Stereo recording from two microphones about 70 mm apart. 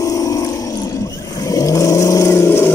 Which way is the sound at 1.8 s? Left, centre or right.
Left.